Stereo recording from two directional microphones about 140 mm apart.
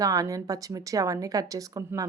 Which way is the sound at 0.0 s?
25° right (ahead or behind).